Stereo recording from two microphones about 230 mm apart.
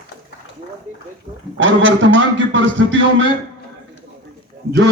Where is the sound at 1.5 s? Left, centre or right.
Right.